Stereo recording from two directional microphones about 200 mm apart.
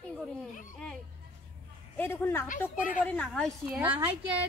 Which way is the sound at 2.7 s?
45° left (ahead or behind).